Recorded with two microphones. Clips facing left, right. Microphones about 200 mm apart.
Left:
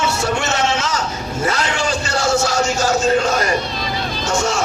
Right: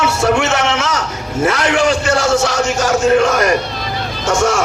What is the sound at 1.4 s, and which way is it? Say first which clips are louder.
Speech: right 7 dB; 90° right.